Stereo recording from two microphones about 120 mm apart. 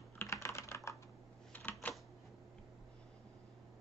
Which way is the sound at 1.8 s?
15° left (ahead or behind).